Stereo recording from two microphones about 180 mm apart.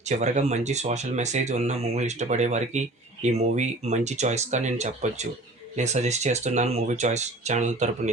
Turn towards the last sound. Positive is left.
turn(degrees=-40)  # may be behind; listen again after turning